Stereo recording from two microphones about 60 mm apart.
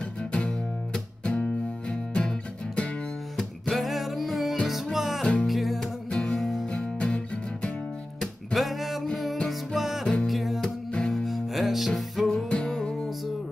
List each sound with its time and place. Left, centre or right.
0.2 s music: centre
3.3 s music: centre
5.2 s music: centre
5.5 s music: centre
6.0 s music: centre
6.4 s music: centre
6.7 s music: centre
8.5 s music: centre
10.9 s music: centre
11.2 s music: centre
12.3 s music: centre